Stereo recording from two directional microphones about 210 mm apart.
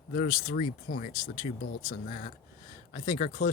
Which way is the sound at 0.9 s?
70° left (ahead or behind).